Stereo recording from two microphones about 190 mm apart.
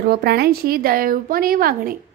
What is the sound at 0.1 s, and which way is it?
A woman's voice, 55° right (ahead or behind).